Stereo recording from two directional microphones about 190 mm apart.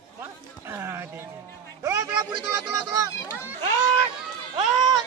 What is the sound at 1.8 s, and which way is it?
Music, 15° right (ahead or behind).